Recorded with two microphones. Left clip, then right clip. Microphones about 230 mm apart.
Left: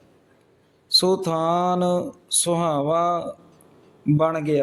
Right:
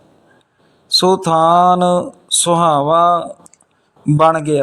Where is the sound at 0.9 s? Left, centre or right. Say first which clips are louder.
Right 7 dB; centre.